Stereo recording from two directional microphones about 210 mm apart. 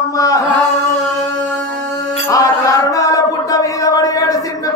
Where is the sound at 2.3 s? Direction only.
15° left (ahead or behind).